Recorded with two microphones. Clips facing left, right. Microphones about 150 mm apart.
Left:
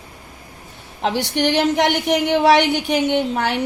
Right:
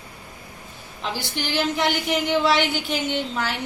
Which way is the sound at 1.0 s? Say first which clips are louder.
Left 10 dB; 65° left (ahead or behind).